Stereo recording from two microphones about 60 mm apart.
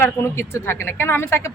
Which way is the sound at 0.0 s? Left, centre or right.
Left.